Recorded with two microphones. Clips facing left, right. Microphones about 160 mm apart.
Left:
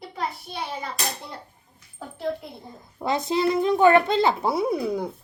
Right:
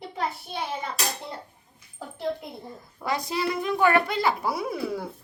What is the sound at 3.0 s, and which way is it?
A child's voice, 25° left (ahead or behind).